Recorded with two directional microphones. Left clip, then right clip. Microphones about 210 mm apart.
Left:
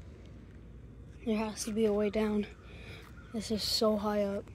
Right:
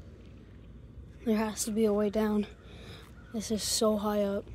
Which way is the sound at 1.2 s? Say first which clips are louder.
Right 4 dB; 20° right (ahead or behind).